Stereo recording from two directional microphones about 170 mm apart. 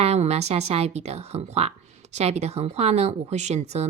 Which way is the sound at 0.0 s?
40° right (ahead or behind).